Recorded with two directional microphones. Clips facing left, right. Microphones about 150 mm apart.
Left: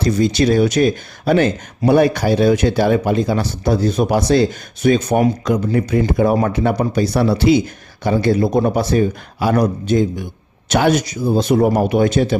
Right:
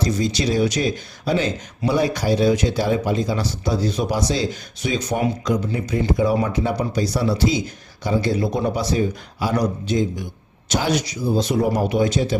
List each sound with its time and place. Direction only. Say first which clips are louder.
0.0 s speech: left 6 dB; 60° left (ahead or behind)